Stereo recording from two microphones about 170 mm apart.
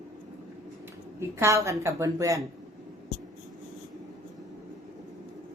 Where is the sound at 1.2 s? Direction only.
15° right (ahead or behind).